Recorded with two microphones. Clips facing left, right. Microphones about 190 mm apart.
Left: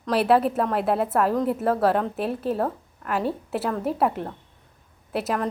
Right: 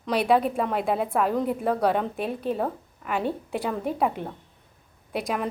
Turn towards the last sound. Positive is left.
turn(degrees=5)  # may be behind; listen again after turning